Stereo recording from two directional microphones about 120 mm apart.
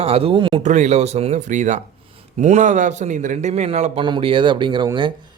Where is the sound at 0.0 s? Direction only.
55° right (ahead or behind).